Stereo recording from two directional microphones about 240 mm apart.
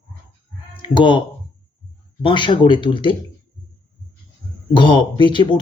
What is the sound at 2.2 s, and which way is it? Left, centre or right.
Speech, centre.